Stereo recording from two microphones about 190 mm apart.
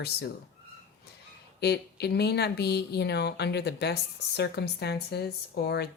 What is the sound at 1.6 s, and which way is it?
Speech, 60° left (ahead or behind).